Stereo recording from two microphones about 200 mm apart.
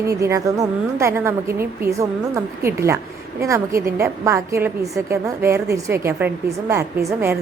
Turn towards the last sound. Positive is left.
turn(degrees=-15)  # may be behind; listen again after turning